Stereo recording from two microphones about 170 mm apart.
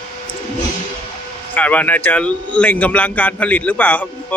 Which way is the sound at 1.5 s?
10° left (ahead or behind).